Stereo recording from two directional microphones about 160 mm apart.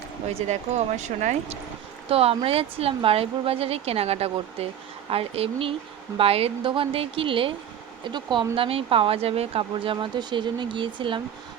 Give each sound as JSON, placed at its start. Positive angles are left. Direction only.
{"t": 0.4, "sound": "speech", "side_deg": -45}
{"t": 2.0, "sound": "speech", "side_deg": -35}